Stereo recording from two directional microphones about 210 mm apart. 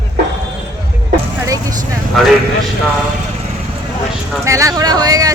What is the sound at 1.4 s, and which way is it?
Speech, 15° right (ahead or behind).